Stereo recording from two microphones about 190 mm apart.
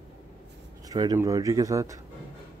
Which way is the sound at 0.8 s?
20° right (ahead or behind).